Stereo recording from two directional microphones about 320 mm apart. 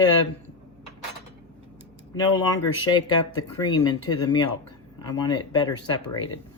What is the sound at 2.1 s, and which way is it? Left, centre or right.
Speech, centre.